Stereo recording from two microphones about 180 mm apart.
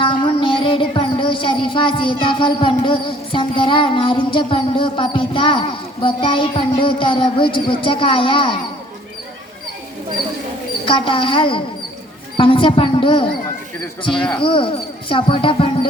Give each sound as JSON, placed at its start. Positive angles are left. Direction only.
{"t": 0.0, "sound": "music", "side_deg": 30}
{"t": 10.8, "sound": "speech", "side_deg": 30}
{"t": 12.4, "sound": "music", "side_deg": 30}
{"t": 14.0, "sound": "speech", "side_deg": 25}